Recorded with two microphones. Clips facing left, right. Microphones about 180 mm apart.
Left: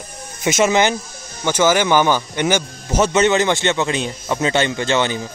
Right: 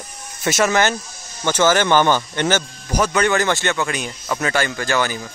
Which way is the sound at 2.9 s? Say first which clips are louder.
Left 3 dB; 25° left (ahead or behind).